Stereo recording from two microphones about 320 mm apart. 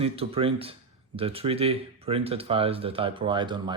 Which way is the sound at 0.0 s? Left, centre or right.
Centre.